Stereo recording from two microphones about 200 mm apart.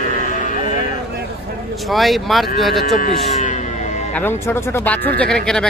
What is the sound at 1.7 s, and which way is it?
Speech, centre (ahead or behind).